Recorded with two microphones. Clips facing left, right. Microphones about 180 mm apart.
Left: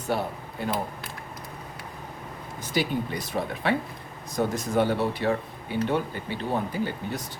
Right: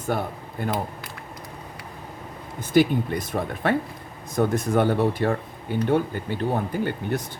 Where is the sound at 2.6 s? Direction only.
55° right (ahead or behind).